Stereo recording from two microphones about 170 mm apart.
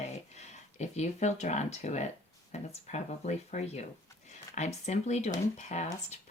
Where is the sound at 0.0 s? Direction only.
40° left (ahead or behind).